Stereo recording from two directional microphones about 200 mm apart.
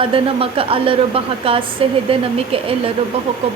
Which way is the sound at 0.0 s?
25° right (ahead or behind).